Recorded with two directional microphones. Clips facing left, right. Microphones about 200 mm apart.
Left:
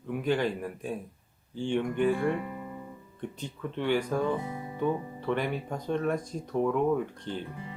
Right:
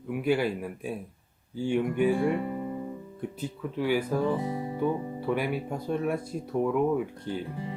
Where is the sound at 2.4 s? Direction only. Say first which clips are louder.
Right 6 dB; 30° right (ahead or behind).